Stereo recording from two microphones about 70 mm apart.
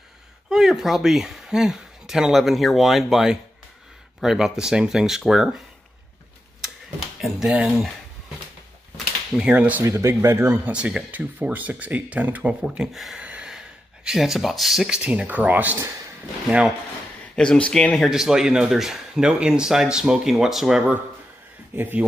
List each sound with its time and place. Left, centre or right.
0.5 s speech: centre
7.2 s a sound: centre
9.4 s speech: centre
9.8 s speech: right
10.7 s speech: centre
12.6 s speech: centre
13.2 s gasp: centre
15.0 s speech: centre
16.4 s speech: centre
17.4 s speech: centre
18.0 s speech: centre
21.7 s speech: right